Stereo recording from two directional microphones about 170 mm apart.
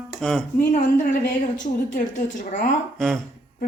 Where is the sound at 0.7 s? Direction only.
50° left (ahead or behind).